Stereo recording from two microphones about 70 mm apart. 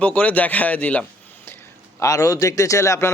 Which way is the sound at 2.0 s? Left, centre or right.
Left.